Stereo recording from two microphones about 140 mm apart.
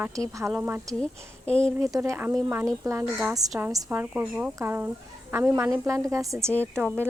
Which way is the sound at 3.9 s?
15° right (ahead or behind).